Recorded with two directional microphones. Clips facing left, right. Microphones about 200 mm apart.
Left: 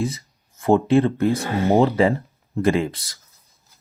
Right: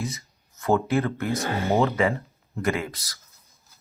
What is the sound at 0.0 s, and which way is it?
Speech, 30° left (ahead or behind).